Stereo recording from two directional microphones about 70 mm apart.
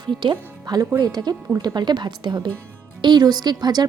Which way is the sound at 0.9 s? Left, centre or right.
Right.